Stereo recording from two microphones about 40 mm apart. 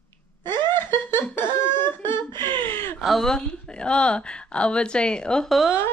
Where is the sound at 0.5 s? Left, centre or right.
Left.